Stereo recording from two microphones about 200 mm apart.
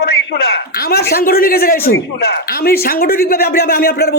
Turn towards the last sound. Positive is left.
turn(degrees=50)  # may be behind; listen again after turning